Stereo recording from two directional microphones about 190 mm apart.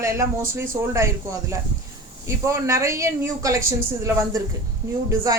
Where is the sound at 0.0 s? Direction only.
15° right (ahead or behind).